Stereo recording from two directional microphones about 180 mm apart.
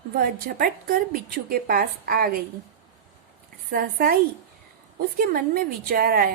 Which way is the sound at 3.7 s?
55° right (ahead or behind).